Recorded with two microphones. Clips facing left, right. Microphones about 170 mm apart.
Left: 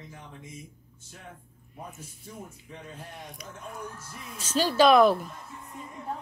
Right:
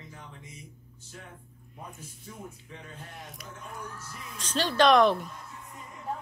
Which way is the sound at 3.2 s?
Centre (ahead or behind).